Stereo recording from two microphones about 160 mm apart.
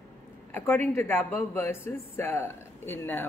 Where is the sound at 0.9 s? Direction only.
15° left (ahead or behind).